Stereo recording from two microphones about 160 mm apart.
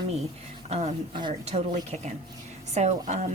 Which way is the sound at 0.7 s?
45° right (ahead or behind).